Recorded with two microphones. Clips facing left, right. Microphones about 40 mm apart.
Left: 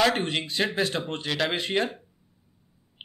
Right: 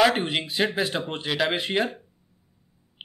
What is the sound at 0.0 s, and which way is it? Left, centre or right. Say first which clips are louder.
Speech: right 3 dB; centre.